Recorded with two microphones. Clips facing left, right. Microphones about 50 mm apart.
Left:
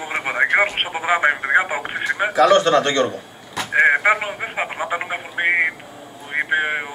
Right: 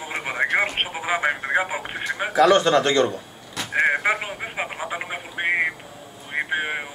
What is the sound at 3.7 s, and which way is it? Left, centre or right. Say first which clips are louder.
Telephone: left 5 dB; left.